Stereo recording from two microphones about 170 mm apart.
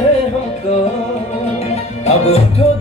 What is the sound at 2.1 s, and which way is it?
Music, 40° left (ahead or behind).